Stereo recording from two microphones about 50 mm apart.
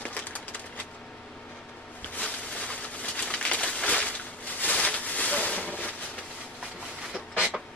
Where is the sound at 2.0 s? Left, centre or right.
Left.